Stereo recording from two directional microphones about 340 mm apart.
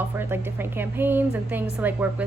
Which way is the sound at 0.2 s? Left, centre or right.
Centre.